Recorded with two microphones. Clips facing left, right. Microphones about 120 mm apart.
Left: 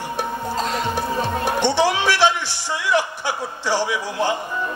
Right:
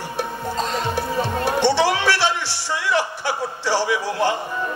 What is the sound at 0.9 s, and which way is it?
Music, 15° left (ahead or behind).